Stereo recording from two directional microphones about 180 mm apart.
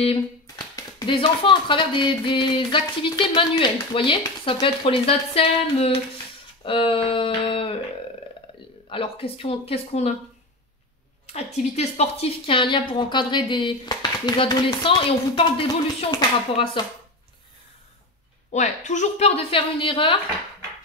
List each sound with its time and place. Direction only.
0.0 s a sound: 30° left (ahead or behind)
0.7 s a woman's voice: 25° left (ahead or behind)
8.8 s a woman's voice: 30° left (ahead or behind)
11.2 s a woman's voice: 40° left (ahead or behind)
18.5 s a woman's voice: 40° left (ahead or behind)